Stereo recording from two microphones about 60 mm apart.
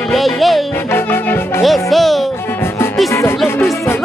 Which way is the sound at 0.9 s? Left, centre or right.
Left.